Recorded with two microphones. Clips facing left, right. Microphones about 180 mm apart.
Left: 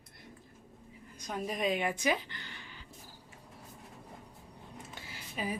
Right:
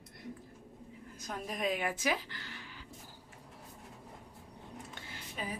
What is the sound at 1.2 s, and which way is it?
Speech, centre (ahead or behind).